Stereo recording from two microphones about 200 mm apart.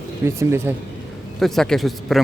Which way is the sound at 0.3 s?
15° right (ahead or behind).